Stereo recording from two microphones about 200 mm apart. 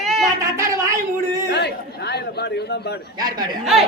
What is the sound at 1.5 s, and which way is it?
Chatter, 55° left (ahead or behind).